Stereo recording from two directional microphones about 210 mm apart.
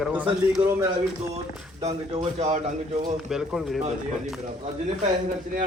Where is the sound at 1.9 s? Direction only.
35° right (ahead or behind).